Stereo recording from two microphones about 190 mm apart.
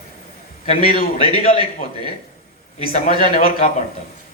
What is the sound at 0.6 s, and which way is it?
Speech, 35° left (ahead or behind).